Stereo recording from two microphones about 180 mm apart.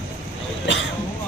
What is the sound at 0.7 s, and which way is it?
Speech, 90° left.